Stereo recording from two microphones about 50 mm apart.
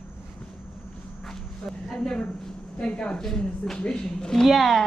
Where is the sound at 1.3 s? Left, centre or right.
Centre.